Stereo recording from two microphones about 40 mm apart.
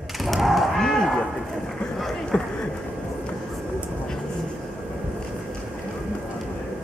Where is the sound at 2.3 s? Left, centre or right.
Left.